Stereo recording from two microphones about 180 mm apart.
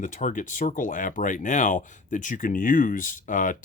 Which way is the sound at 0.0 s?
45° left (ahead or behind).